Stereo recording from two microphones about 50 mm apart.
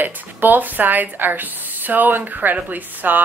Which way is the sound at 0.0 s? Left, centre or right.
Right.